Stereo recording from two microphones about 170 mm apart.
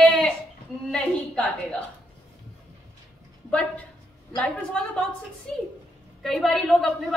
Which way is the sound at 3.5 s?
5° left (ahead or behind).